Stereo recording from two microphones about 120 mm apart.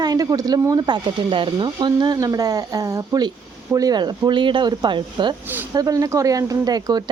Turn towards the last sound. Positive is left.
turn(degrees=-35)  # may be behind; listen again after turning